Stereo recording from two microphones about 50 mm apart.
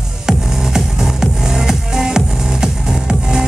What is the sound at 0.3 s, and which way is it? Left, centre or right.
Music, centre.